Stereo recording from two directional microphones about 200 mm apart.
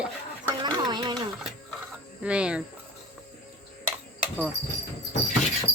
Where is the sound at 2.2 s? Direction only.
5° right (ahead or behind).